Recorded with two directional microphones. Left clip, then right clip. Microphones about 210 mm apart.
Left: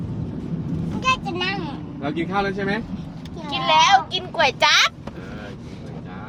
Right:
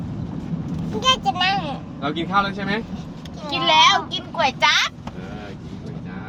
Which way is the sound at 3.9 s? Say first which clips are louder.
Left 1 dB; 50° left (ahead or behind).